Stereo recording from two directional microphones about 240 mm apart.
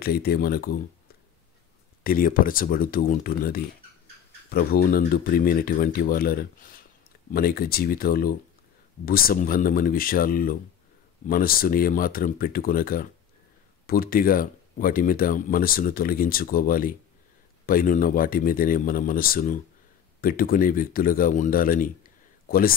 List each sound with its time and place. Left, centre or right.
0.0 s speech: left
2.0 s speech: left